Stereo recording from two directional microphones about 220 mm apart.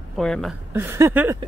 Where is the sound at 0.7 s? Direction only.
10° right (ahead or behind).